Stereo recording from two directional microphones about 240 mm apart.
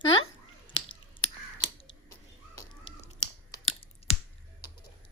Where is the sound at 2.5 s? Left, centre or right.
Left.